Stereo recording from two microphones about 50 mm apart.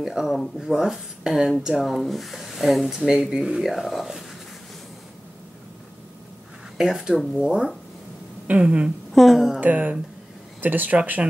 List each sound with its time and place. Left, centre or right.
0.0 s speech: centre
1.9 s speech: centre
6.8 s speech: centre
9.1 s speech: centre
9.6 s speech: right